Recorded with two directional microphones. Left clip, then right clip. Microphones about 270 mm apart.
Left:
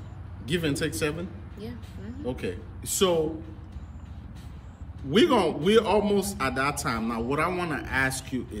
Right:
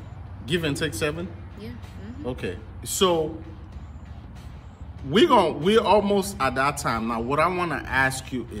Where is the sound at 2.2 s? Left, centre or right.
Centre.